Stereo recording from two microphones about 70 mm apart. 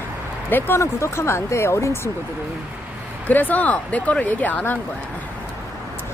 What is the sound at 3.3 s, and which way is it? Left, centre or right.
Speech, left.